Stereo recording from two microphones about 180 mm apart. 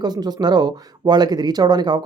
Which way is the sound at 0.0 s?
20° right (ahead or behind).